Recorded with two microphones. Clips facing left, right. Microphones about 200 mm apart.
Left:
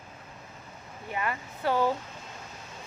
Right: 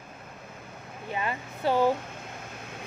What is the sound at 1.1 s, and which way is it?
Speech, 25° right (ahead or behind).